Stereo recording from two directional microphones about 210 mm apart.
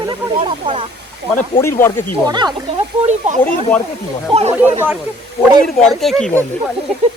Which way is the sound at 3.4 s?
5° left (ahead or behind).